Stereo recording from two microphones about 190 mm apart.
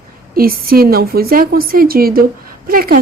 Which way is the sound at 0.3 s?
50° right (ahead or behind).